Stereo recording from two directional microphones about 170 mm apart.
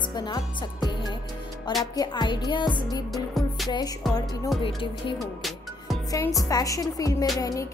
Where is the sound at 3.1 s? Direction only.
Centre (ahead or behind).